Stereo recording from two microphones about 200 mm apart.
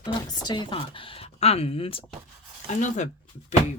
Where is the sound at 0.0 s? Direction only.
20° left (ahead or behind).